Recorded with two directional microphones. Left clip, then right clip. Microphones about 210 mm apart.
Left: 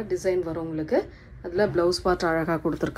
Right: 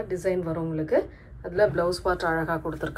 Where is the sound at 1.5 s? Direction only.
40° left (ahead or behind).